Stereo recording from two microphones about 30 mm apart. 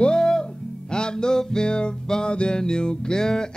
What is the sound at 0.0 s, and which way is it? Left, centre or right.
Music, left.